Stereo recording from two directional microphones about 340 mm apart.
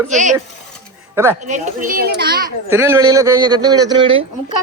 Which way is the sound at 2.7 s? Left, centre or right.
Centre.